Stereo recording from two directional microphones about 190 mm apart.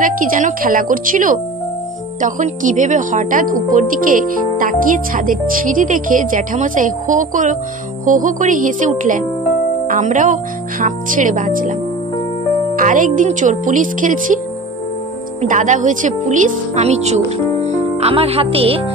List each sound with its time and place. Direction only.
0.0 s speech: 45° right (ahead or behind)
12.7 s speech: 45° right (ahead or behind)
15.4 s speech: 40° right (ahead or behind)